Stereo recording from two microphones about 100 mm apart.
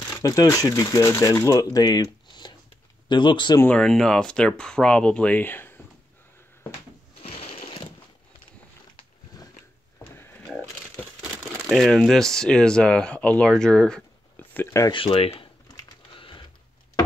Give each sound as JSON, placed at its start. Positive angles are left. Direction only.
{"t": 0.2, "sound": "speech", "side_deg": 35}
{"t": 3.6, "sound": "speech", "side_deg": 10}
{"t": 7.2, "sound": "sewing machine", "side_deg": 80}
{"t": 10.1, "sound": "a sound", "side_deg": 20}
{"t": 11.7, "sound": "speech", "side_deg": 0}
{"t": 14.3, "sound": "a sound", "side_deg": 20}
{"t": 14.9, "sound": "speech", "side_deg": 50}
{"t": 15.1, "sound": "speech", "side_deg": 75}
{"t": 16.2, "sound": "a sound", "side_deg": 60}